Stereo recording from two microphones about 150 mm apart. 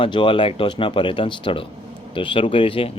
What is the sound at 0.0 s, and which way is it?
Speech, 35° left (ahead or behind).